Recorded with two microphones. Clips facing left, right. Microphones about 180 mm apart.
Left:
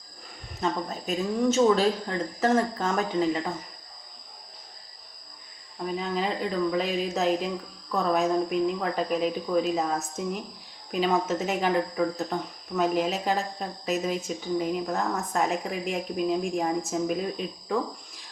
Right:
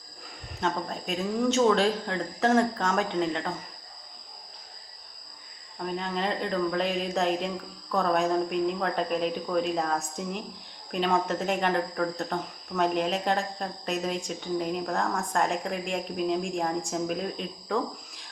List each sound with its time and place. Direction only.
0.6 s speech: centre (ahead or behind)
5.8 s speech: 5° left (ahead or behind)